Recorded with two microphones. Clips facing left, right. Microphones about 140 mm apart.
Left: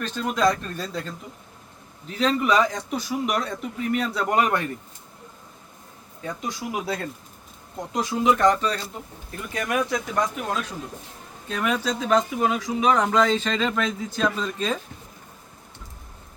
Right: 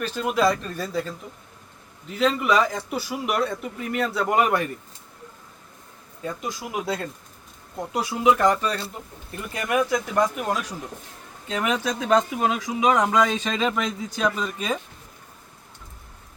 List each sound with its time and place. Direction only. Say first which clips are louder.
0.0 s a man's voice: right 1 dB; 5° right (ahead or behind)
6.2 s a man's voice: even; centre (ahead or behind)